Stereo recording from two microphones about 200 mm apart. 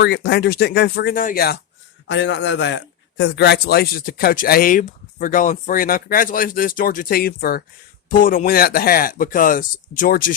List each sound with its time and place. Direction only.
0.0 s a man's voice: 55° left (ahead or behind)
2.0 s a man's voice: 65° left (ahead or behind); by 10.3 s 45° left (ahead or behind)